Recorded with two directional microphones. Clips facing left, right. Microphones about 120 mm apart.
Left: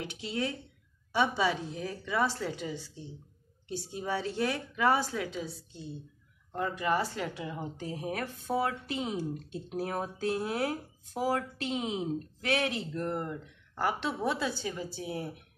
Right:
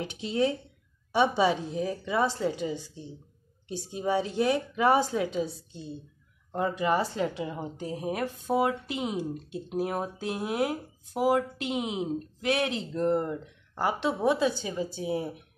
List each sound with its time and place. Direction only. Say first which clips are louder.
0.0 s speech: right 7 dB; 25° right (ahead or behind)